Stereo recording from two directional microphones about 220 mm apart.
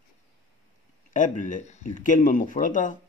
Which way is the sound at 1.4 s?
35° left (ahead or behind).